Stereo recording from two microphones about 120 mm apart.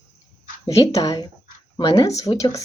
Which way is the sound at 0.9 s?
30° left (ahead or behind).